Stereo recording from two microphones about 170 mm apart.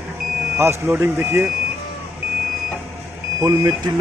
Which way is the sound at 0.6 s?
15° right (ahead or behind).